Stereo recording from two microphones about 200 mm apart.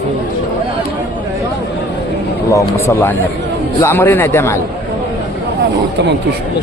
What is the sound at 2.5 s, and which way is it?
A man's voice, 15° left (ahead or behind).